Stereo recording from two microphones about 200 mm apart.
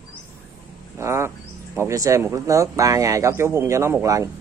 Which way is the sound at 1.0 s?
15° right (ahead or behind).